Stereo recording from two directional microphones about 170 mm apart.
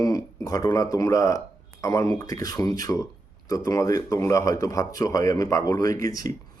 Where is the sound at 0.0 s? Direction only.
20° left (ahead or behind).